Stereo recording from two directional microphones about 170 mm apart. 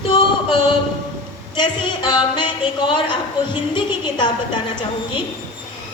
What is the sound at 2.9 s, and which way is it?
A woman's voice, 30° left (ahead or behind).